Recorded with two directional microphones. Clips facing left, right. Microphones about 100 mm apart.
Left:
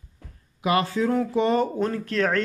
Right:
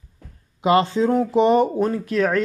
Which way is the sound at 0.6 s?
25° right (ahead or behind).